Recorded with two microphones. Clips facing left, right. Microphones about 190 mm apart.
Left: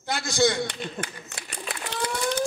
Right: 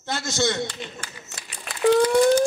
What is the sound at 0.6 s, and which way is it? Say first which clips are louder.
Speech: left 2 dB; 60° left (ahead or behind).